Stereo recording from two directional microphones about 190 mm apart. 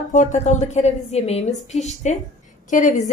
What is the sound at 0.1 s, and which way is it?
A woman's voice, 40° left (ahead or behind).